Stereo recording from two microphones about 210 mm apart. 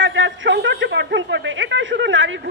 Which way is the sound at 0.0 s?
60° right (ahead or behind).